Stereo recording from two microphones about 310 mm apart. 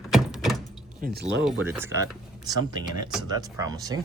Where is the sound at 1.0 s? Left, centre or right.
Right.